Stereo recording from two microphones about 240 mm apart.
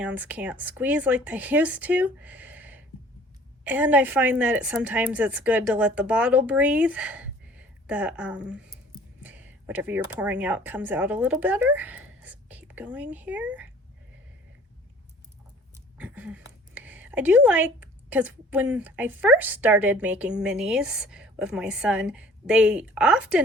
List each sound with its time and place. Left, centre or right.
0.0 s a woman's voice: centre
16.0 s a woman's voice: centre